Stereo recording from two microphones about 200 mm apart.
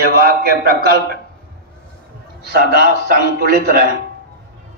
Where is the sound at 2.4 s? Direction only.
50° right (ahead or behind).